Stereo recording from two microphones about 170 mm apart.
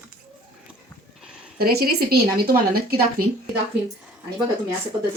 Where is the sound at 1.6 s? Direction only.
65° right (ahead or behind).